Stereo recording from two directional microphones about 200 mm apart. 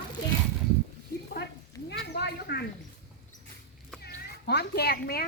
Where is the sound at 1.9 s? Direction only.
55° left (ahead or behind).